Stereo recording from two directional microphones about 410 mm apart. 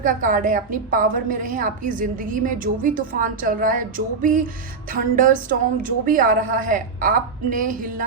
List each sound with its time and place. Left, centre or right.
0.0 s a woman's voice: centre